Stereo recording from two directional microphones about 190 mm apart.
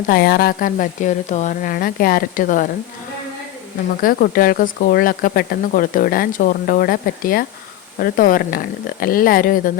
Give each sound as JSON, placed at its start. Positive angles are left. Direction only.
{"t": 0.1, "sound": "speech", "side_deg": 55}
{"t": 4.0, "sound": "speech", "side_deg": 50}